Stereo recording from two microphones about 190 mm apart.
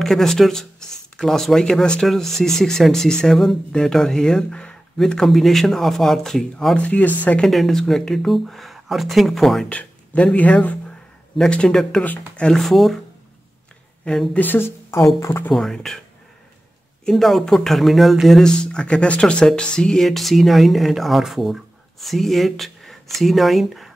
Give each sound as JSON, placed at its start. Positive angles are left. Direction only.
{"t": 0.0, "sound": "speech", "side_deg": 0}
{"t": 14.0, "sound": "speech", "side_deg": 5}
{"t": 15.5, "sound": "speech", "side_deg": 0}
{"t": 17.0, "sound": "speech", "side_deg": 0}